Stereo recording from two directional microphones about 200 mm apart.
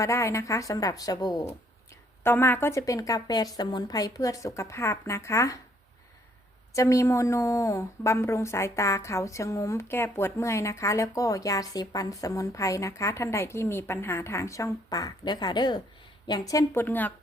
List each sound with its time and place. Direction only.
0.0 s a woman's voice: 15° left (ahead or behind)
6.7 s a woman's voice: 15° left (ahead or behind)